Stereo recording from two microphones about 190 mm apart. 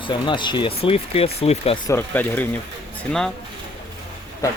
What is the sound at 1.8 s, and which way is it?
Speech, 10° left (ahead or behind).